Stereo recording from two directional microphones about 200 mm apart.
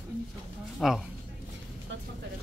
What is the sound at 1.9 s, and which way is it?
Speech, 65° right (ahead or behind).